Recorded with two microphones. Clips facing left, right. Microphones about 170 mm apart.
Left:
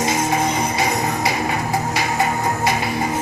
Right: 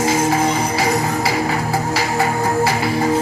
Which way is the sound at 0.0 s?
20° left (ahead or behind).